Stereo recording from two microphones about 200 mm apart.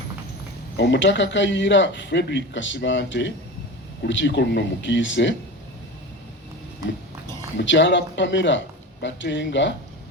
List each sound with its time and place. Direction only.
0.8 s speech: 60° left (ahead or behind)
7.6 s speech: 65° left (ahead or behind)